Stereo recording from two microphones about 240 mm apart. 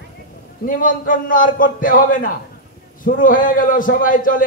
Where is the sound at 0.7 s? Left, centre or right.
Left.